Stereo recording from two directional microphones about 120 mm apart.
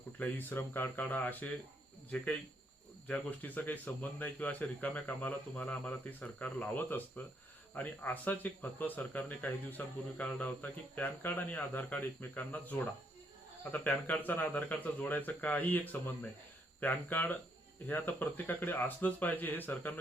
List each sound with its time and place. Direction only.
0.2 s speech: 15° left (ahead or behind)